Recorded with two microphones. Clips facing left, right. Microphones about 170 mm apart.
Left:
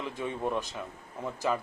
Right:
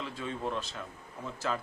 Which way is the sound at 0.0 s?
15° left (ahead or behind).